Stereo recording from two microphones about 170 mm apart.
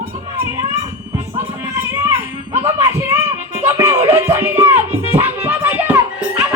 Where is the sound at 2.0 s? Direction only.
15° right (ahead or behind).